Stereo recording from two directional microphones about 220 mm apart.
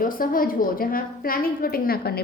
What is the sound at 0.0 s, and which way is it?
A woman's voice, 40° left (ahead or behind).